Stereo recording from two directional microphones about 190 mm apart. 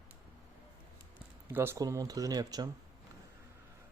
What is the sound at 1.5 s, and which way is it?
A man's voice, 10° right (ahead or behind).